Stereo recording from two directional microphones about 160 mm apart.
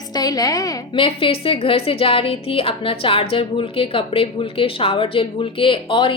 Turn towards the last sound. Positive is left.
turn(degrees=30)  # may be behind; listen again after turning